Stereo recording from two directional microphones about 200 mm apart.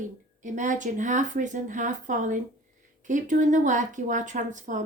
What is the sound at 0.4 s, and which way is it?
A woman's voice, 40° right (ahead or behind).